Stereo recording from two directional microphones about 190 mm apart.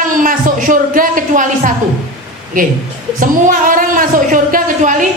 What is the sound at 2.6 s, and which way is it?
A woman's voice, 45° right (ahead or behind).